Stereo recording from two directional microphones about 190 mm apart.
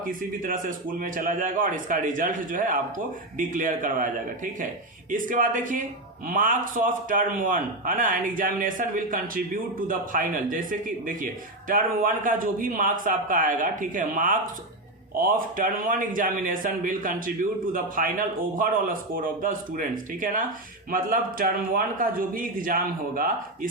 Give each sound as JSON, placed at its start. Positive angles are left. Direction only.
{"t": 0.0, "sound": "a man's voice", "side_deg": -45}
{"t": 5.1, "sound": "a man's voice", "side_deg": -45}